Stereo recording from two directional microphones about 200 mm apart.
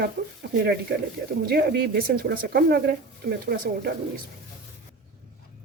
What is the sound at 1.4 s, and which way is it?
Speech, 50° right (ahead or behind).